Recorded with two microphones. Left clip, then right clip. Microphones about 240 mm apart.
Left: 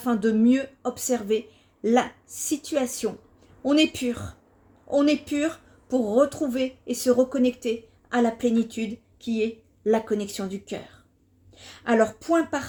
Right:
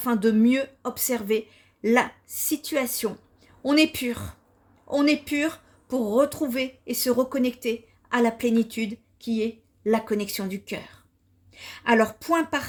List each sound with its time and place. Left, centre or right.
0.0 s a woman's voice: right